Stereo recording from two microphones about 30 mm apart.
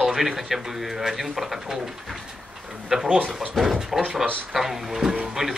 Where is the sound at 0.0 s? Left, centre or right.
Centre.